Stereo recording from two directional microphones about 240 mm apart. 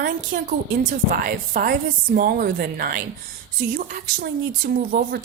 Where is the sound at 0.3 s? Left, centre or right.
Right.